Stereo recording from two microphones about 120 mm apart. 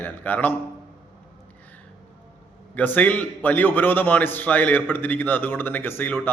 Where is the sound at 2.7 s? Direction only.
15° left (ahead or behind).